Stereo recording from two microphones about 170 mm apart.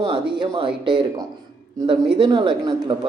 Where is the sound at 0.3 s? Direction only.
30° right (ahead or behind).